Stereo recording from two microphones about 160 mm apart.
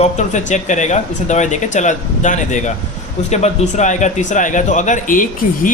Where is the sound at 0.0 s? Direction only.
50° left (ahead or behind).